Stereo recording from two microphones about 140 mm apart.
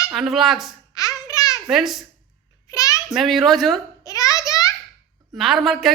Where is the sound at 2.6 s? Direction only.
25° left (ahead or behind).